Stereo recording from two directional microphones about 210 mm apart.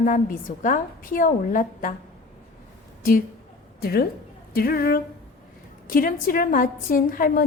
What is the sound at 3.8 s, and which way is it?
A woman's voice, 50° left (ahead or behind).